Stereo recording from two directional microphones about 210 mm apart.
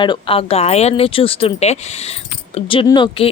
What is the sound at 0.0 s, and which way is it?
A woman's voice, 25° left (ahead or behind).